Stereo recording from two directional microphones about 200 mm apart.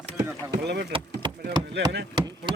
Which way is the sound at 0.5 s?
55° right (ahead or behind).